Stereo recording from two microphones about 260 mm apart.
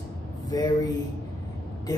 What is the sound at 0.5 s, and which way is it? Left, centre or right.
Speech, centre.